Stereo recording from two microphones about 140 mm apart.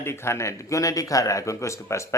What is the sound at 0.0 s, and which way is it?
Speech, 20° left (ahead or behind).